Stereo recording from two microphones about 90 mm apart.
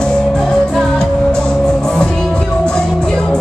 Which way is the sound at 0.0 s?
10° left (ahead or behind).